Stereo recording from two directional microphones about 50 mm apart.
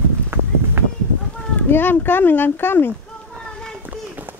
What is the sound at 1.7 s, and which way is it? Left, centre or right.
Speech, left.